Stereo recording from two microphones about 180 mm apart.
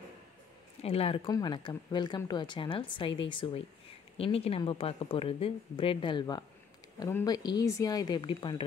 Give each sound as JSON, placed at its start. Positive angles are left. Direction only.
{"t": 0.8, "sound": "a woman's voice", "side_deg": 35}